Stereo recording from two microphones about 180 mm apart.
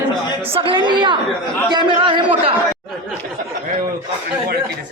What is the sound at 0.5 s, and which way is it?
A man's voice, 30° right (ahead or behind).